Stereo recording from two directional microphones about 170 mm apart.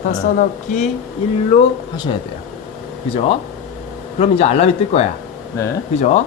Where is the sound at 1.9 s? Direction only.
25° left (ahead or behind).